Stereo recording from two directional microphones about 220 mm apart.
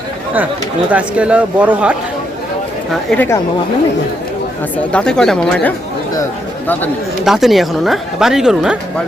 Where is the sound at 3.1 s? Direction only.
10° left (ahead or behind).